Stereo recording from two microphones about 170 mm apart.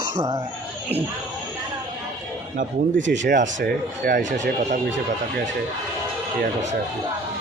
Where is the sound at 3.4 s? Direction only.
80° right; by 4.4 s 50° right (ahead or behind).